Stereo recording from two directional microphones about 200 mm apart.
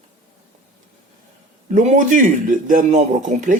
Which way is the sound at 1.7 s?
40° right (ahead or behind).